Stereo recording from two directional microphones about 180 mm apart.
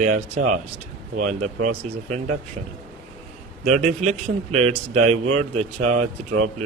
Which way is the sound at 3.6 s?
40° right (ahead or behind).